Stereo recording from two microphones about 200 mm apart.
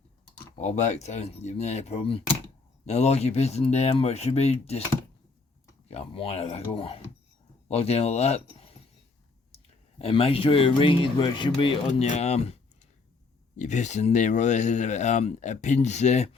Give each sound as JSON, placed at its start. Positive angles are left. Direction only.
{"t": 0.6, "sound": "speech", "side_deg": 35}
{"t": 5.9, "sound": "speech", "side_deg": 30}
{"t": 10.0, "sound": "speech", "side_deg": 30}
{"t": 13.6, "sound": "speech", "side_deg": 35}